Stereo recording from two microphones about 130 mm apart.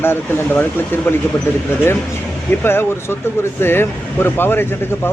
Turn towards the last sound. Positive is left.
turn(degrees=15)  # may be behind; listen again after turning